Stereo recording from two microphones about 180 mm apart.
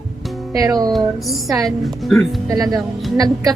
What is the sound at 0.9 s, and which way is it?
Speech, centre (ahead or behind).